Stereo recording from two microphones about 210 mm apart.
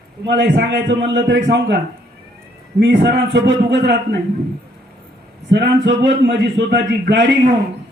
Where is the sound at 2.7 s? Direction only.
55° right (ahead or behind).